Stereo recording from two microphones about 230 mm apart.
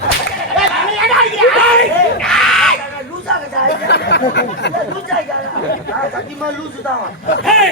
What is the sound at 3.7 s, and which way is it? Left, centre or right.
Speech, left.